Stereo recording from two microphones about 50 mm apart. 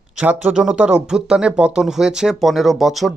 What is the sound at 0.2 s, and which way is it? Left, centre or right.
Speech, right.